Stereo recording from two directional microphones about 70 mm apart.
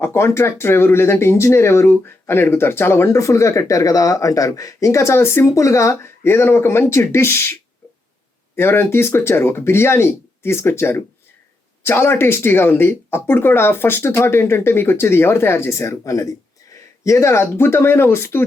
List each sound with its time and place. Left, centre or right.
0.0 s speech: left